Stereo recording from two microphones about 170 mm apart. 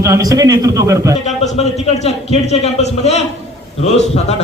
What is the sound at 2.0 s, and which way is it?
A man's voice, 40° left (ahead or behind).